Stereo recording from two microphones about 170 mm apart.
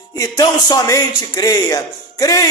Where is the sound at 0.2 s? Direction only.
20° left (ahead or behind).